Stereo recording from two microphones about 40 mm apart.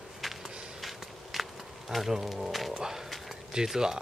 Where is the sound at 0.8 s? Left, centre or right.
Centre.